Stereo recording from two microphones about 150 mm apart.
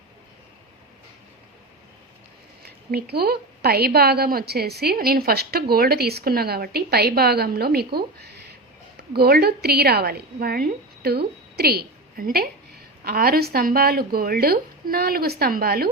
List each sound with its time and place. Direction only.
2.9 s a woman's voice: 90° right